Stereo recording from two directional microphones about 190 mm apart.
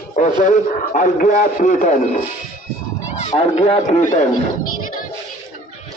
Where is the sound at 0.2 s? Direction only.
40° left (ahead or behind).